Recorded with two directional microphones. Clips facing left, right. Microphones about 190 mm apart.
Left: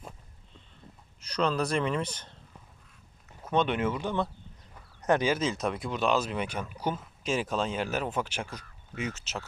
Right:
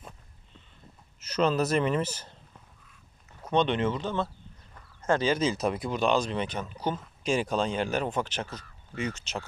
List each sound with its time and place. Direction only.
1.2 s speech: 5° right (ahead or behind)
3.4 s speech: 5° left (ahead or behind)
4.7 s chicken: 20° left (ahead or behind)
5.3 s speech: centre (ahead or behind)